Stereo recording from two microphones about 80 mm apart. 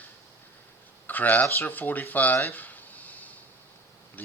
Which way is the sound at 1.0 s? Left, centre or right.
Left.